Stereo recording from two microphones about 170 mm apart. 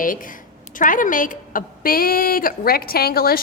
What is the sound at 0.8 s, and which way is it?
A woman's voice, 50° left (ahead or behind).